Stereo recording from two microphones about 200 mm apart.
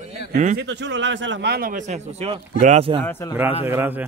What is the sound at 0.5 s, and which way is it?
A man's voice, 60° right (ahead or behind).